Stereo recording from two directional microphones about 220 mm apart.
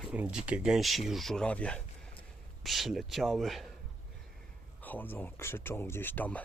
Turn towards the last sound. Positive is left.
turn(degrees=5)  # may be behind; listen again after turning